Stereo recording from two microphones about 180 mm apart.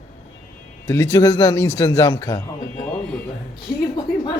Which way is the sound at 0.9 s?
15° left (ahead or behind).